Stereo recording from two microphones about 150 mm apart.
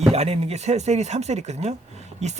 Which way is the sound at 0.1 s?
45° right (ahead or behind).